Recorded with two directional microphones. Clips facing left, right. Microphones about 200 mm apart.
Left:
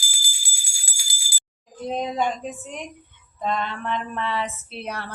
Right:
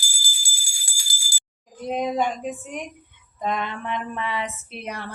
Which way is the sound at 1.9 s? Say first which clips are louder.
Right 2 dB; 5° right (ahead or behind).